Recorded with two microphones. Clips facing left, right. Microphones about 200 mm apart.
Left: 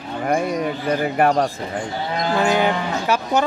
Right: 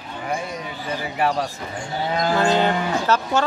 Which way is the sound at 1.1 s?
50° left (ahead or behind).